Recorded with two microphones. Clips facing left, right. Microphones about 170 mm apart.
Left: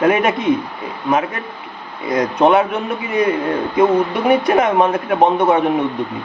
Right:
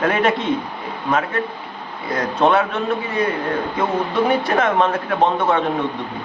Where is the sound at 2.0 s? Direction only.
15° left (ahead or behind).